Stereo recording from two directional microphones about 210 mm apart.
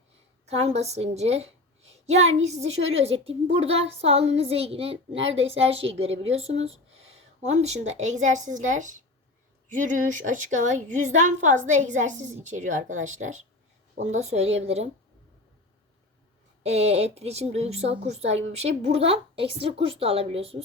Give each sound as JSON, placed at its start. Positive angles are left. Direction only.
{"t": 0.4, "sound": "a woman's voice", "side_deg": -30}
{"t": 16.6, "sound": "a woman's voice", "side_deg": -30}